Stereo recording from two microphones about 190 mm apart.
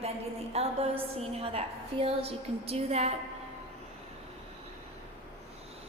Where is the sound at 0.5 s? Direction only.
35° right (ahead or behind).